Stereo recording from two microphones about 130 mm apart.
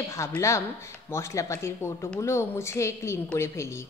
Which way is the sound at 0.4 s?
25° left (ahead or behind).